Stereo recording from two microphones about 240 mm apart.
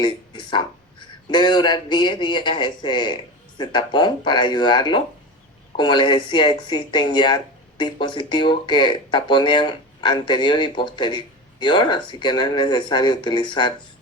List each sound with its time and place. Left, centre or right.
0.0 s speech: centre